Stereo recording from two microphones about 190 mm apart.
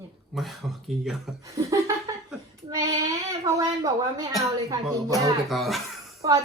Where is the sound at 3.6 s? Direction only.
20° right (ahead or behind).